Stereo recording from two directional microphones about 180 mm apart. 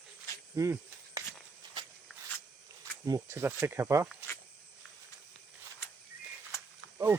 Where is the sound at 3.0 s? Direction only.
15° right (ahead or behind).